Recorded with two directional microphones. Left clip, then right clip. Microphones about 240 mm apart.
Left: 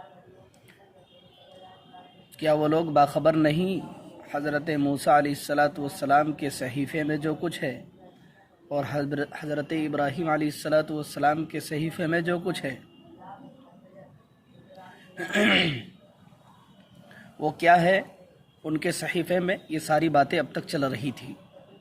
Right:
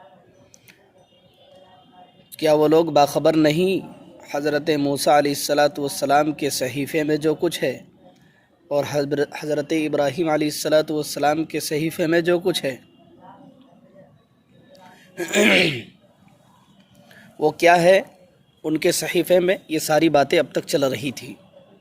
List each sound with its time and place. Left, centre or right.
2.3 s speech: right
15.1 s speech: right
17.4 s speech: right